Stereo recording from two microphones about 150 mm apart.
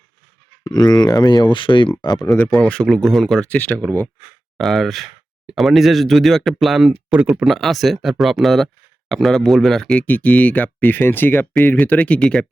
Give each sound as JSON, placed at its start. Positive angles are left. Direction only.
{"t": 0.6, "sound": "speech", "side_deg": 25}
{"t": 2.3, "sound": "speech", "side_deg": 10}